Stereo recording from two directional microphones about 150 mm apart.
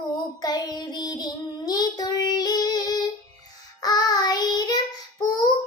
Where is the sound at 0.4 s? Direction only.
25° left (ahead or behind).